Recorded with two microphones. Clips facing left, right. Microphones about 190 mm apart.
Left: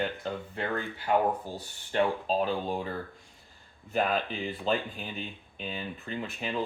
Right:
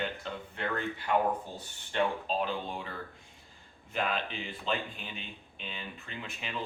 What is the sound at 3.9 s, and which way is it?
Speech, 40° left (ahead or behind).